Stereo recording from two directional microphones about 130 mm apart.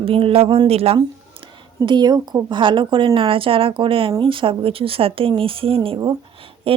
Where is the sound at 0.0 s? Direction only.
45° right (ahead or behind).